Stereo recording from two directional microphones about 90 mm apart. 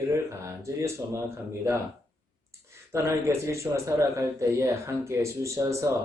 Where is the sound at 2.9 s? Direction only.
35° right (ahead or behind).